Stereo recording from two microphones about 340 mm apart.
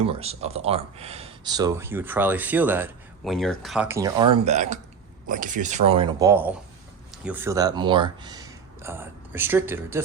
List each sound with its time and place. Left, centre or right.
0.0 s speech: centre
4.4 s speech: centre